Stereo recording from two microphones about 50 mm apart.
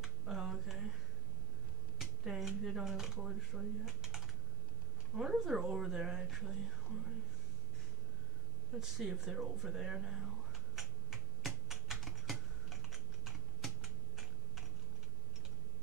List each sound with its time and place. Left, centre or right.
0.0 s a sound: centre
2.0 s speech: centre
8.7 s speech: centre
10.8 s computer keyboard: centre